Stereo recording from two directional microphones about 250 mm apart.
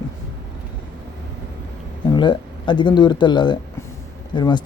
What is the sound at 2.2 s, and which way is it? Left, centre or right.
Speech, centre.